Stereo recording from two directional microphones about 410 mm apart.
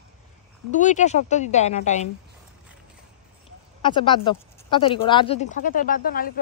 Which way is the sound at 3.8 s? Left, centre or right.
Centre.